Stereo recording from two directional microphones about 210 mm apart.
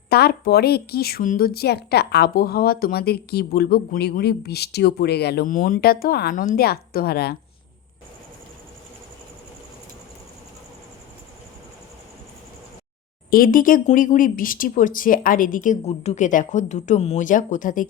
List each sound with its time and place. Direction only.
0.1 s speech: 50° left (ahead or behind)
13.3 s speech: 40° left (ahead or behind)